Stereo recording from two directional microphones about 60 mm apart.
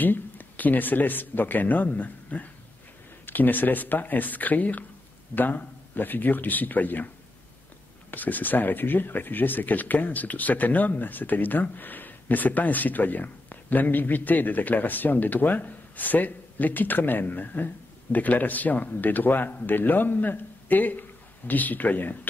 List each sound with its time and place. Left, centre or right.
0.0 s speech: left
8.1 s speech: left